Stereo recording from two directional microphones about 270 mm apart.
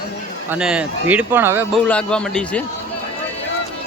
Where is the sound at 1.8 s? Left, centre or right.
Centre.